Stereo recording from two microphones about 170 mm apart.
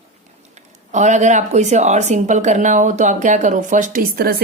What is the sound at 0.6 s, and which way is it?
Speech, 45° right (ahead or behind).